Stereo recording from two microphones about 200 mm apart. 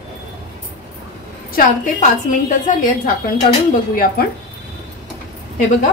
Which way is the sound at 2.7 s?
40° left (ahead or behind).